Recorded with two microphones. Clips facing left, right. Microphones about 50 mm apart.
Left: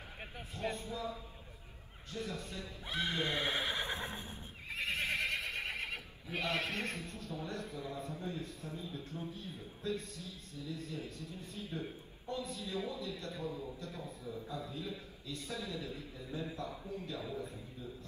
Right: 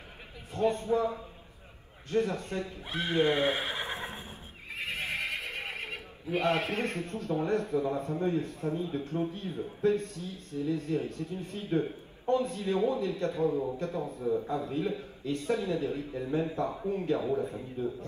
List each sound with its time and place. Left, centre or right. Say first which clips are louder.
0.6 s a man's voice: right 13 dB; right
3.0 s speech: right 9 dB; right
6.7 s a man's voice: right 8 dB; right